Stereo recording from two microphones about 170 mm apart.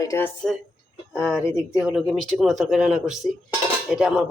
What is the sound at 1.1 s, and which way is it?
Speech, 5° right (ahead or behind).